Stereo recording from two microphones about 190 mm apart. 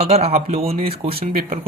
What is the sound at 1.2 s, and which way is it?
Speech, 45° right (ahead or behind).